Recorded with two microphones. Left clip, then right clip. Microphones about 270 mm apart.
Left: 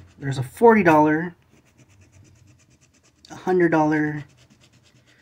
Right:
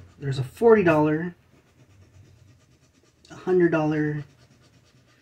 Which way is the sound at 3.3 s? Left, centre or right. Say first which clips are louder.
Left 2 dB; left.